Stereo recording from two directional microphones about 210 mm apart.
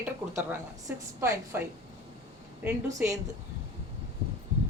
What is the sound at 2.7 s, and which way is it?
Speech, 15° right (ahead or behind).